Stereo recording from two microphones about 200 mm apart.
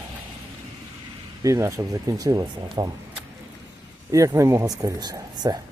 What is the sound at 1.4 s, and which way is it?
Speech, 15° right (ahead or behind).